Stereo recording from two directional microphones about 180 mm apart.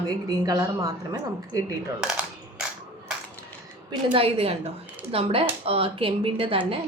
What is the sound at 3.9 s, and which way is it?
A woman's voice, 30° right (ahead or behind).